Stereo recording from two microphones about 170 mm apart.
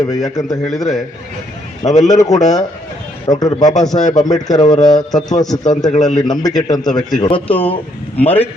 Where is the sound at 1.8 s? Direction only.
45° left (ahead or behind).